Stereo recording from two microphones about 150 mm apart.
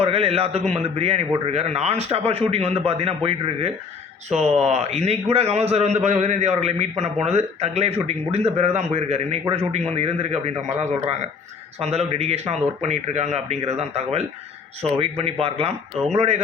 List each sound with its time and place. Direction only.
0.0 s a man's voice: 40° right (ahead or behind)